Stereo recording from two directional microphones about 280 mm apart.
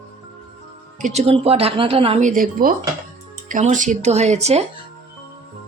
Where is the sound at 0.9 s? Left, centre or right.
Right.